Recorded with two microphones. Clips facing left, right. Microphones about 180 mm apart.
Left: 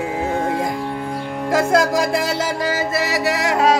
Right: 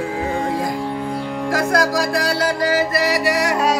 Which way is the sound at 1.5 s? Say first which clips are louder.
Left 3 dB; 25° left (ahead or behind).